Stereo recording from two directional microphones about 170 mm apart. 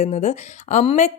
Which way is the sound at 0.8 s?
30° left (ahead or behind).